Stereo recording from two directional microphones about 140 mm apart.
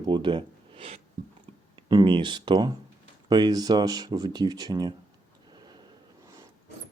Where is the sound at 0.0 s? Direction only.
35° right (ahead or behind).